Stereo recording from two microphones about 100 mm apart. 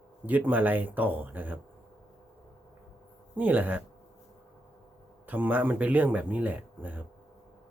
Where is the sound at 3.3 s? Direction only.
15° right (ahead or behind).